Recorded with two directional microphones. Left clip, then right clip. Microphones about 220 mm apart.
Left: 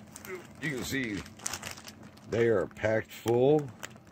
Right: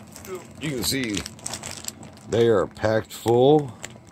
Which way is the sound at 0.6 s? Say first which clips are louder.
Right 7 dB; 10° right (ahead or behind).